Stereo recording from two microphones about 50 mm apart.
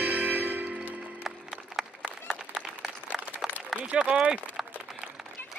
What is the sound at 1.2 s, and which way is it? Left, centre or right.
Music, centre.